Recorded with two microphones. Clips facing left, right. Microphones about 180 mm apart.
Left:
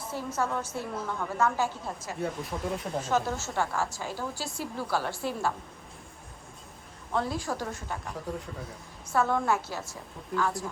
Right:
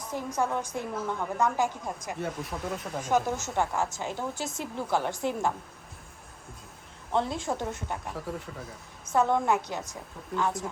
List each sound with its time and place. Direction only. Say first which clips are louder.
0.0 s a woman's voice: right 1 dB; 15° right (ahead or behind)
2.1 s speech: left 4 dB; centre (ahead or behind)
3.0 s a woman's voice: right 4 dB; 15° right (ahead or behind)
7.1 s a woman's voice: right 2 dB; 25° right (ahead or behind)
8.0 s speech: even; centre (ahead or behind)
9.0 s a woman's voice: right 2 dB; 20° right (ahead or behind)